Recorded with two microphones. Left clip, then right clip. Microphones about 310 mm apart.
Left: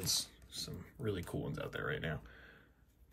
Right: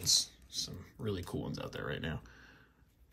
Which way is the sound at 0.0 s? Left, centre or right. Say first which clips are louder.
Right 7 dB; centre.